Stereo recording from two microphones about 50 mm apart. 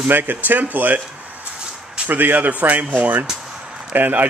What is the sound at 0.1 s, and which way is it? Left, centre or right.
Speech, right.